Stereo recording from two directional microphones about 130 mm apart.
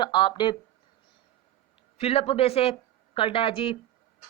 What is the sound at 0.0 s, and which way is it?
Speech, 35° left (ahead or behind).